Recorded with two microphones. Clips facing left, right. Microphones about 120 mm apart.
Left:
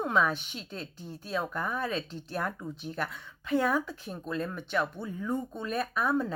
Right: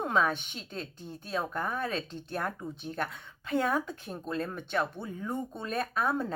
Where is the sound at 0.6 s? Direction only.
5° left (ahead or behind).